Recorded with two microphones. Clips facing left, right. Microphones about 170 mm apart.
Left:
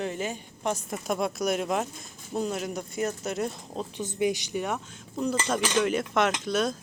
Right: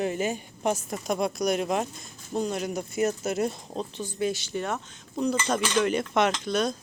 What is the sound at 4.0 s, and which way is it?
A woman's voice, 15° left (ahead or behind).